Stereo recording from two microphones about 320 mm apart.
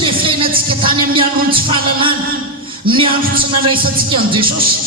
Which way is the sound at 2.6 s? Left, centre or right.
Centre.